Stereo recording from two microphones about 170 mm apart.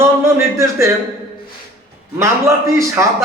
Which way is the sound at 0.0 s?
15° right (ahead or behind).